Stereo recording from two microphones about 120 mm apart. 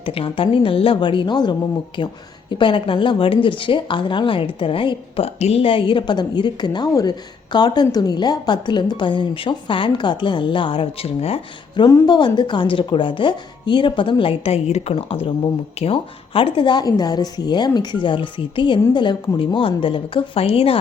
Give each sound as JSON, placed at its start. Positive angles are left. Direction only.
{"t": 0.0, "sound": "speech", "side_deg": 50}
{"t": 12.0, "sound": "speech", "side_deg": 40}